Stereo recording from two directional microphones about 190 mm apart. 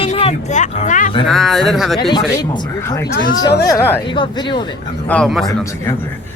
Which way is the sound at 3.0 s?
55° left (ahead or behind).